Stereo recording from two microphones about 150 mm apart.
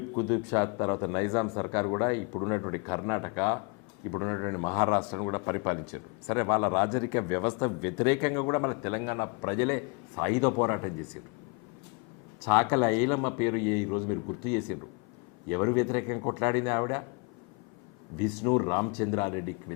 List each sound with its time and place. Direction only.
0.2 s speech: 20° left (ahead or behind)
12.5 s speech: 20° left (ahead or behind)
18.2 s speech: 20° left (ahead or behind)